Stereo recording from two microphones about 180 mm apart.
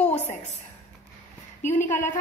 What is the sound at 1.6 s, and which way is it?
Speech, 45° left (ahead or behind).